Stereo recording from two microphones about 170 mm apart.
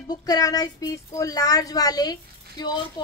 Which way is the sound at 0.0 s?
20° left (ahead or behind).